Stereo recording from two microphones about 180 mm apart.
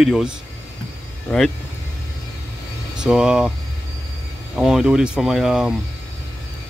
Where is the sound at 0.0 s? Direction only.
Centre (ahead or behind).